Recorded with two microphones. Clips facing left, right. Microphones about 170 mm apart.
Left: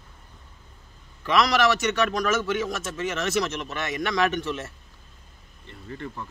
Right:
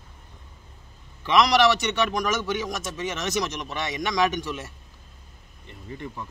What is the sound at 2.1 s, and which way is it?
Speech, 15° right (ahead or behind).